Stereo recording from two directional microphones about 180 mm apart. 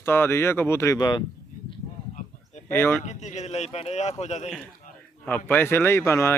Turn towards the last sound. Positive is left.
turn(degrees=15)  # may be behind; listen again after turning